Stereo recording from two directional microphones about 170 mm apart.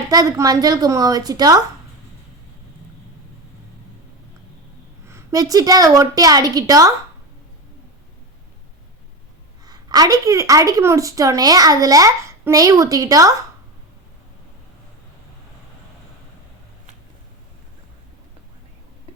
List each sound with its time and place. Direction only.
0.1 s a woman's voice: 20° right (ahead or behind)
5.0 s a woman's voice: 20° right (ahead or behind)
9.6 s a woman's voice: 20° right (ahead or behind)